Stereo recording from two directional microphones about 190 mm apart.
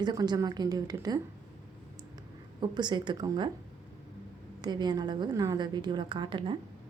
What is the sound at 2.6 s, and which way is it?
Speech, 25° right (ahead or behind).